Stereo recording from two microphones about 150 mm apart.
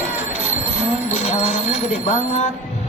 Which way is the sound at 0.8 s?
45° left (ahead or behind).